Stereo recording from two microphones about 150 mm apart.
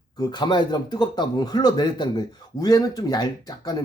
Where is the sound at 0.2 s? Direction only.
30° left (ahead or behind).